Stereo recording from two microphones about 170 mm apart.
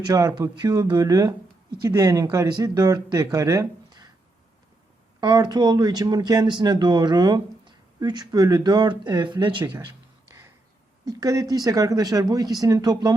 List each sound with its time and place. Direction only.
0.0 s speech: 20° right (ahead or behind)
5.2 s speech: 25° right (ahead or behind)
11.0 s speech: 20° right (ahead or behind)